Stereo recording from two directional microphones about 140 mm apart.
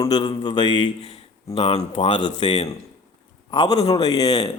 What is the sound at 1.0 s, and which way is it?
Speech, 45° left (ahead or behind).